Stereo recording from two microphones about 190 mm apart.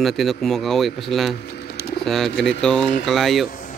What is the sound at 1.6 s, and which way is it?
Typing, 60° left (ahead or behind).